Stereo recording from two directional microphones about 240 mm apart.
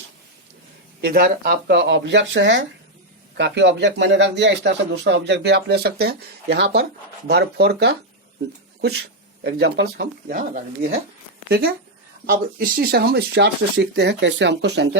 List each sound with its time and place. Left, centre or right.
1.0 s a man's voice: right